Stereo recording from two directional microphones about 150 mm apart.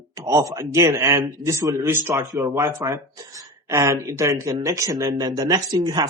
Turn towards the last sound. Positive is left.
turn(degrees=-25)  # may be behind; listen again after turning